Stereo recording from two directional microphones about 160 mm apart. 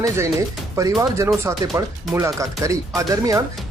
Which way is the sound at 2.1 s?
20° right (ahead or behind).